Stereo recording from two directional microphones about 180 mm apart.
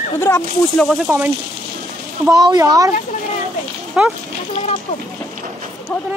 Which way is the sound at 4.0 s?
5° right (ahead or behind).